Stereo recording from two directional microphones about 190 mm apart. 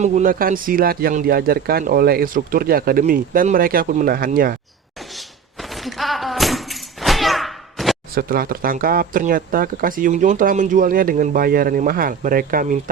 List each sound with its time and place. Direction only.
0.0 s speech: 40° right (ahead or behind)
5.1 s a sound: centre (ahead or behind)
8.1 s speech: 50° right (ahead or behind)